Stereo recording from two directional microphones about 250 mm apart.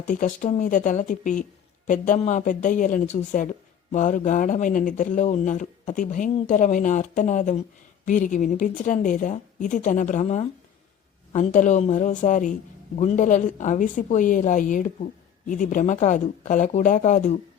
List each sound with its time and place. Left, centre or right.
0.1 s a woman's voice: left